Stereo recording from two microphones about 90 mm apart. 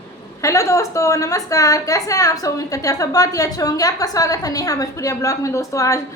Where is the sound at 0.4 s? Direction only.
35° left (ahead or behind).